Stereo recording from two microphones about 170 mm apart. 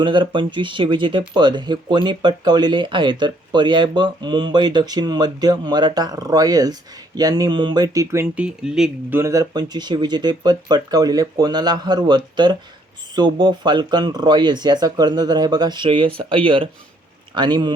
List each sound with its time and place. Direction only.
0.0 s speech: 30° right (ahead or behind)